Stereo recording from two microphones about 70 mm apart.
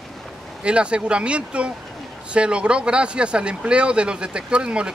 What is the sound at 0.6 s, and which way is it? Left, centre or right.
Speech, centre.